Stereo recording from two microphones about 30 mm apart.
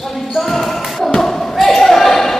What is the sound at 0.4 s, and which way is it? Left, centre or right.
Basketball bounce, centre.